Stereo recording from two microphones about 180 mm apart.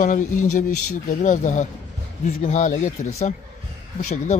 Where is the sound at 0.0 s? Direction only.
45° left (ahead or behind).